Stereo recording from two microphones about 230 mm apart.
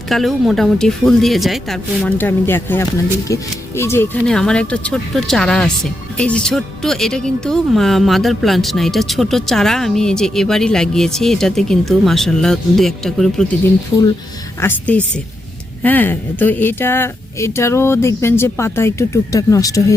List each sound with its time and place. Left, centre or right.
0.1 s speech: centre
14.6 s speech: centre